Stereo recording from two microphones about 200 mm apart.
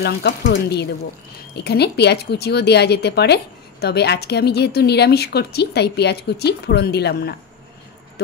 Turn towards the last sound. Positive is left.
turn(degrees=55)  # may be behind; listen again after turning